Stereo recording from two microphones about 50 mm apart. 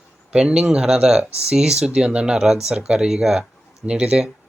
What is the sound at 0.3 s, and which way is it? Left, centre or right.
Speech, centre.